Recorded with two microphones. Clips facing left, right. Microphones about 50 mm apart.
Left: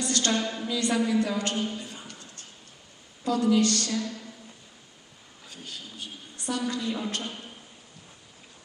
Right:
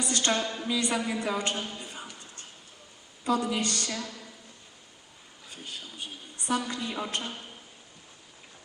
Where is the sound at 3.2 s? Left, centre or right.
Right.